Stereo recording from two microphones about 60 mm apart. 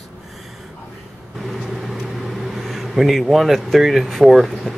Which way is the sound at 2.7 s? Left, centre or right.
Centre.